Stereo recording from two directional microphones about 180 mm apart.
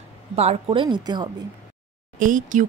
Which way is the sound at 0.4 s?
35° right (ahead or behind).